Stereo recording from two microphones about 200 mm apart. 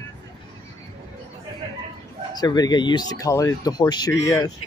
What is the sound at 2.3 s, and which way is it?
Speech, 20° left (ahead or behind).